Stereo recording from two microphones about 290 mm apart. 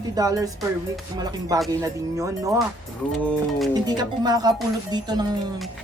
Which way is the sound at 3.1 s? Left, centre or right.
Centre.